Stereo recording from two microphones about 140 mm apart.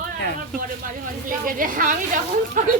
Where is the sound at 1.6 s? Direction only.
75° right (ahead or behind).